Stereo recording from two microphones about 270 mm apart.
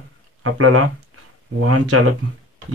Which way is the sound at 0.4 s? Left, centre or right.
Right.